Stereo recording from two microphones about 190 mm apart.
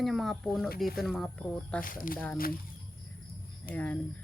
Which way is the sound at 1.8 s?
45° left (ahead or behind).